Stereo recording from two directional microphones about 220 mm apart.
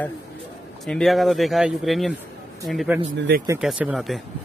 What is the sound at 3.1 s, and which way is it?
Speech, 55° right (ahead or behind).